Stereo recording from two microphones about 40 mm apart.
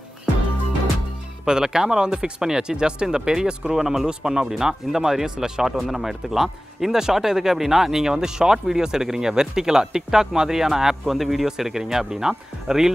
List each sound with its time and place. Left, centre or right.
1.4 s speech: centre